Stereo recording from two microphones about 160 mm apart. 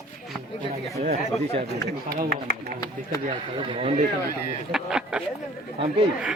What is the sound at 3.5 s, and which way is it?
Speech, 30° right (ahead or behind).